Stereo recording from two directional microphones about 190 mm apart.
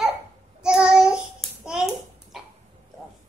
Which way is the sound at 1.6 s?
5° right (ahead or behind).